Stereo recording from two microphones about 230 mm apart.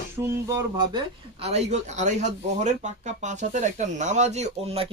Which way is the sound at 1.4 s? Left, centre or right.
Right.